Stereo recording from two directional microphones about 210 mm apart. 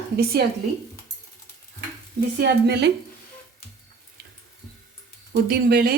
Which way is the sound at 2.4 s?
50° right (ahead or behind).